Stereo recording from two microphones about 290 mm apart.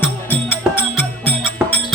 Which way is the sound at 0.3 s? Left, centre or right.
Centre.